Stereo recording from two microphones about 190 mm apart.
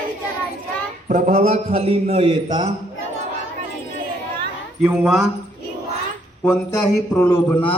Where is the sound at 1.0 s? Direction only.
40° right (ahead or behind).